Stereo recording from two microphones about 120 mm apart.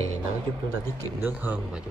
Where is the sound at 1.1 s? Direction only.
15° right (ahead or behind).